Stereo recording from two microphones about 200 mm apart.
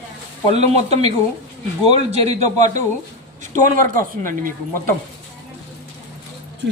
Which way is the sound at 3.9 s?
45° right (ahead or behind).